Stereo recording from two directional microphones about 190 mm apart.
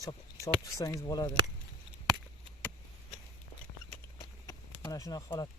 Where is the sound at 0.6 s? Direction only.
15° left (ahead or behind).